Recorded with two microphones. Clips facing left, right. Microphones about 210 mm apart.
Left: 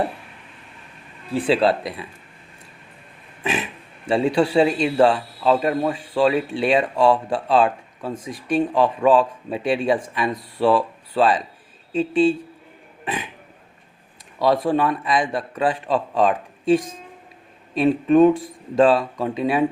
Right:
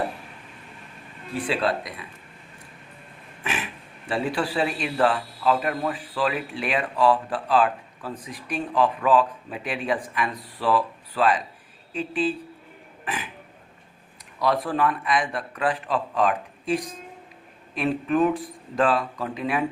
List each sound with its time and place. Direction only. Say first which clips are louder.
1.3 s speech: left 7 dB; 30° left (ahead or behind)
3.4 s a sound: left 6 dB; 30° left (ahead or behind)
4.1 s speech: left 8 dB; 25° left (ahead or behind)
13.1 s burping: left 4 dB; 25° left (ahead or behind)
14.3 s speech: left 5 dB; 25° left (ahead or behind)
17.8 s speech: left 8 dB; 25° left (ahead or behind)